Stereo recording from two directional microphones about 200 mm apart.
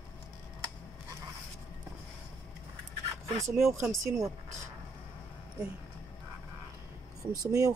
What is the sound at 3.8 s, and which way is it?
Speech, 15° right (ahead or behind).